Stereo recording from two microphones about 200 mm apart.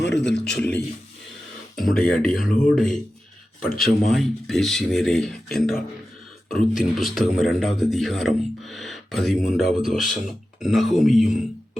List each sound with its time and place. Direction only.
0.0 s speech: 60° left (ahead or behind)
0.3 s a man's voice: 5° left (ahead or behind)